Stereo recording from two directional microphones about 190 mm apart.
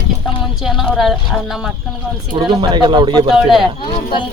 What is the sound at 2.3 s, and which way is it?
A man's voice, 25° right (ahead or behind).